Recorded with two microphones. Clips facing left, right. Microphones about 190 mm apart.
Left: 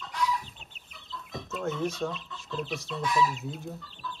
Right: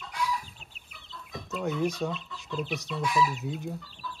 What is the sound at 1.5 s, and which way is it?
Speech, centre (ahead or behind).